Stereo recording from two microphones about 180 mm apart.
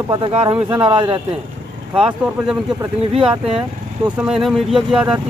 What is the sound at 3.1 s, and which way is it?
Speech, 30° right (ahead or behind).